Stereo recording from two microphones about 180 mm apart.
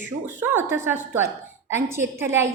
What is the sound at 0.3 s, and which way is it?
A woman's voice, 10° right (ahead or behind).